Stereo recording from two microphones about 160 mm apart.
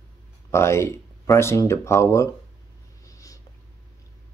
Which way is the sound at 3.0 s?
20° left (ahead or behind).